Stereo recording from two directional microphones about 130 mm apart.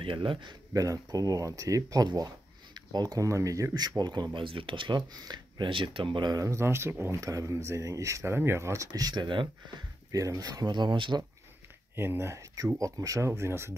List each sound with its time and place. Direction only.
0.0 s speech: 40° right (ahead or behind)
0.7 s speech: 25° right (ahead or behind)
10.1 s speech: 25° right (ahead or behind)
11.9 s speech: 20° right (ahead or behind)